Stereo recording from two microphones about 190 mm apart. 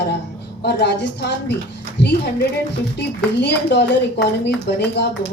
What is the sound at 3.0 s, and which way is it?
A woman's voice, 65° left (ahead or behind).